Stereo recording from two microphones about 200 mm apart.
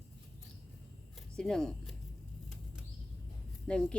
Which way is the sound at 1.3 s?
5° left (ahead or behind).